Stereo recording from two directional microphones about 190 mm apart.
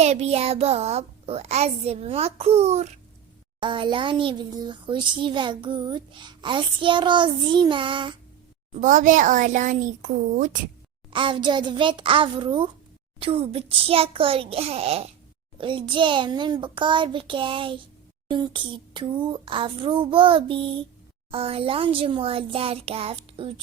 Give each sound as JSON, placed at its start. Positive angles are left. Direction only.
{"t": 0.0, "sound": "a child's voice", "side_deg": -35}
{"t": 8.7, "sound": "a woman's voice", "side_deg": -45}
{"t": 11.1, "sound": "a child's voice", "side_deg": -25}